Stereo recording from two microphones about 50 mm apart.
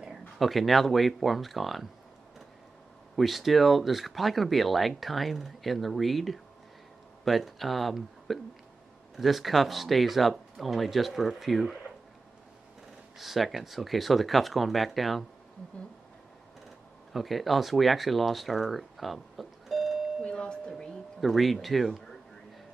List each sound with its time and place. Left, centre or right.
0.4 s speech: centre
3.2 s speech: centre
13.2 s speech: centre
17.1 s speech: centre
20.2 s a sound: centre
20.7 s speech: centre